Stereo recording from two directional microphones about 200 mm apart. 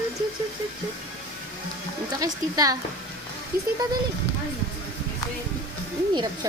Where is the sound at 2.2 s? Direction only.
15° right (ahead or behind).